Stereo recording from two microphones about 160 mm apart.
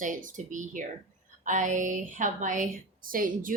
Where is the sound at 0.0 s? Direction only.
55° right (ahead or behind).